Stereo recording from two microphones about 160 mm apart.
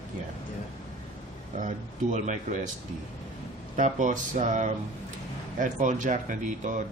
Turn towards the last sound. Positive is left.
turn(degrees=-50)  # may be behind; listen again after turning